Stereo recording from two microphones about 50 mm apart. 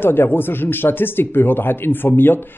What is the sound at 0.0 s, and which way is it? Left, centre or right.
Speech, left.